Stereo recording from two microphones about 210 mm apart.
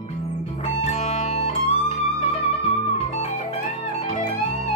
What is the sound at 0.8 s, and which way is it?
Music, 30° left (ahead or behind).